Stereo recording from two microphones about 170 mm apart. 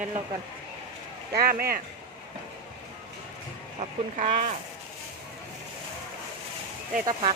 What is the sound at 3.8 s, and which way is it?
Speech, 40° right (ahead or behind).